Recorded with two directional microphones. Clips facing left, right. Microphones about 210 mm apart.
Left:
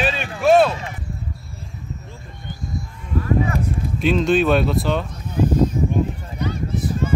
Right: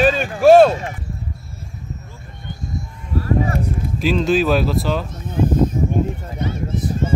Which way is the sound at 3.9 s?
Centre (ahead or behind).